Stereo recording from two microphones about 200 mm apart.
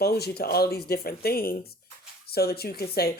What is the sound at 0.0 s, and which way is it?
Speech, 50° left (ahead or behind).